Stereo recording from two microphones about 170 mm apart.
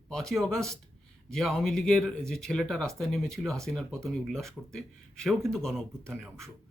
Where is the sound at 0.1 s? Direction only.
5° left (ahead or behind).